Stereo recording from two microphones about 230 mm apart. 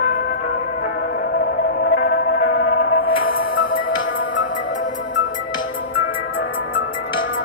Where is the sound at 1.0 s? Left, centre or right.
Left.